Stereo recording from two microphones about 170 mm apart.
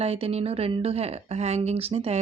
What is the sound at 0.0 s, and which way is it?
A woman's voice, 35° right (ahead or behind).